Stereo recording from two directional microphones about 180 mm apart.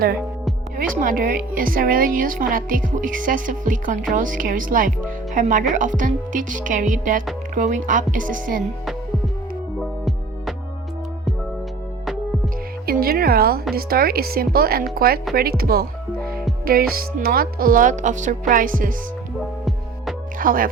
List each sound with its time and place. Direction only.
0.8 s a woman's voice: 50° right (ahead or behind)
12.8 s a sound: 55° right (ahead or behind)
13.7 s speech: 55° right (ahead or behind)
15.4 s music: 55° right (ahead or behind)
16.6 s a woman's voice: 55° right (ahead or behind)
20.4 s speech: 50° right (ahead or behind)